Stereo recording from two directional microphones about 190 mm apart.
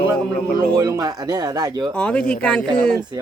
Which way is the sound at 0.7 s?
20° right (ahead or behind).